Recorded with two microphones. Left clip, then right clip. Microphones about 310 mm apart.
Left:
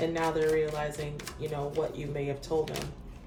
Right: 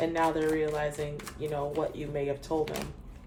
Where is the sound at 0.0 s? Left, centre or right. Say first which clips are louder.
Right 1 dB; right.